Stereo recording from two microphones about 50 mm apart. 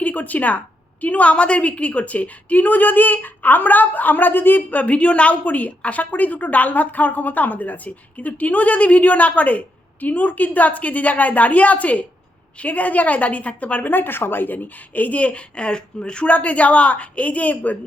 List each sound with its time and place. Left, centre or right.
0.0 s a woman's voice: left
13.9 s a woman's voice: left